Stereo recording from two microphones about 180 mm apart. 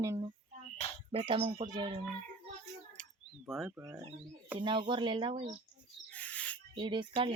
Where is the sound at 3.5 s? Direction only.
Centre (ahead or behind).